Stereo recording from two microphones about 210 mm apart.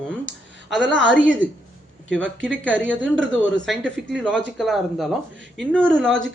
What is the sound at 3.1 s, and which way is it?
Speech, 65° right (ahead or behind).